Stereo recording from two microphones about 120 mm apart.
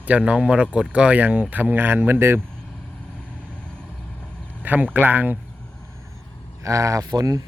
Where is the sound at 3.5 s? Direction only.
10° left (ahead or behind).